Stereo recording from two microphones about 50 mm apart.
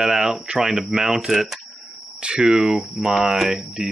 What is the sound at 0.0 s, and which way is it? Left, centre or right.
Speech, centre.